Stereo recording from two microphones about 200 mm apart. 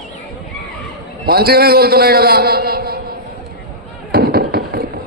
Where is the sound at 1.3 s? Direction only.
50° right (ahead or behind).